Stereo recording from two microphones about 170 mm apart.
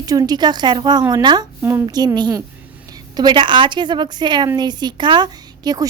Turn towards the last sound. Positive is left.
turn(degrees=-25)  # may be behind; listen again after turning